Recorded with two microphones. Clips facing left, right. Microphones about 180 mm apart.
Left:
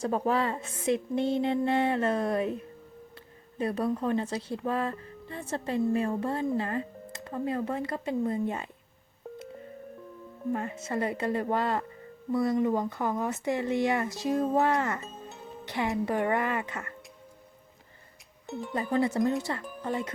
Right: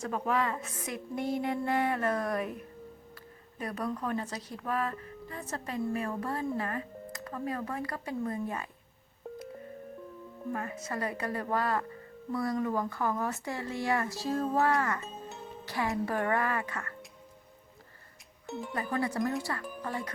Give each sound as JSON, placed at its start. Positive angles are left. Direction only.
{"t": 0.0, "sound": "a woman's voice", "side_deg": 30}
{"t": 10.5, "sound": "a woman's voice", "side_deg": 25}
{"t": 18.7, "sound": "a woman's voice", "side_deg": 25}